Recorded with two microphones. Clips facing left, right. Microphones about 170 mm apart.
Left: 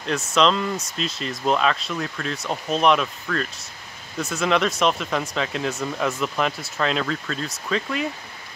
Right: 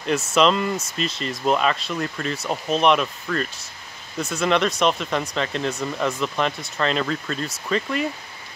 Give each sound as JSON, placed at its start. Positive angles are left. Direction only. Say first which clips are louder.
{"t": 0.0, "sound": "speech", "louder": "right 1 dB", "side_deg": -5}